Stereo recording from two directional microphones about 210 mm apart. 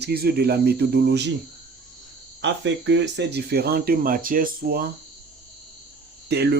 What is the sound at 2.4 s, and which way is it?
Speech, 55° right (ahead or behind).